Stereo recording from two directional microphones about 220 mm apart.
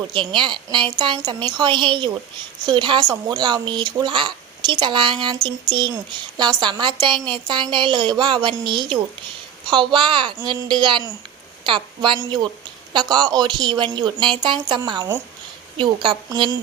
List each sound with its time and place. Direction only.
0.1 s a woman's voice: 20° right (ahead or behind)